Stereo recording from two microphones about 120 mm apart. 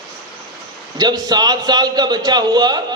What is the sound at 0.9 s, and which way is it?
A man's voice, 35° right (ahead or behind).